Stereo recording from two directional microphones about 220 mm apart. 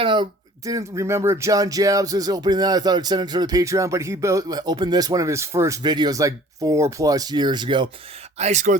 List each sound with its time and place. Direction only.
0.0 s speech: 20° right (ahead or behind)
8.4 s speech: 30° right (ahead or behind)